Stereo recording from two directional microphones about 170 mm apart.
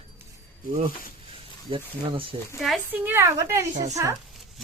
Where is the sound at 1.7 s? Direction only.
30° right (ahead or behind).